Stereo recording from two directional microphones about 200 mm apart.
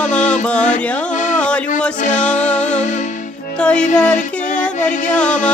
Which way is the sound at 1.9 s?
35° left (ahead or behind).